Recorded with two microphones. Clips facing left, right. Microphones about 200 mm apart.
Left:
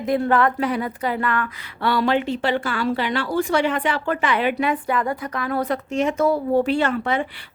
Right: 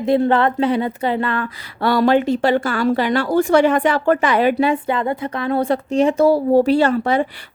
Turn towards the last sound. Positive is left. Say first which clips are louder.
# right 5 dB
turn(degrees=-40)  # may be behind; listen again after turning